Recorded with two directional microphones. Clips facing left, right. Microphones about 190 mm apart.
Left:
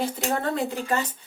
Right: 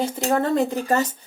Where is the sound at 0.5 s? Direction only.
40° right (ahead or behind).